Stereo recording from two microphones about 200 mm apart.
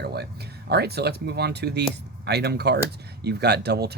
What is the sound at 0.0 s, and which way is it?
Music, 55° right (ahead or behind).